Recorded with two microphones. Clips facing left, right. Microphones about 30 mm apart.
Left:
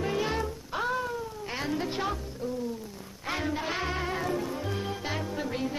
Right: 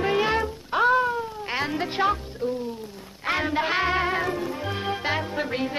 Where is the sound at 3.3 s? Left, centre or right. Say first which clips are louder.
Right 7 dB; right.